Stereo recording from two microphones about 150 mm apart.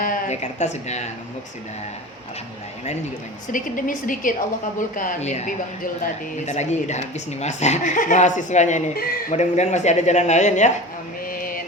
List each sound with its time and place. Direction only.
0.0 s speech: 55° left (ahead or behind)
3.5 s a woman's voice: 65° left (ahead or behind)
11.3 s mantra: 70° left (ahead or behind)